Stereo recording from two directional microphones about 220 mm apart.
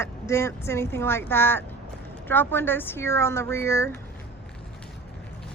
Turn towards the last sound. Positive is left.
turn(degrees=10)  # may be behind; listen again after turning